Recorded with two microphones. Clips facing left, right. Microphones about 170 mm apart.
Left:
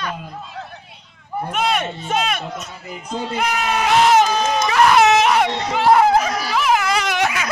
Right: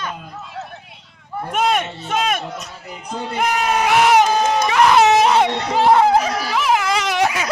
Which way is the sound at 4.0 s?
15° right (ahead or behind).